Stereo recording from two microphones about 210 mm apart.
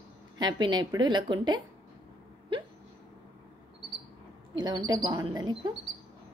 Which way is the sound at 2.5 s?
25° right (ahead or behind).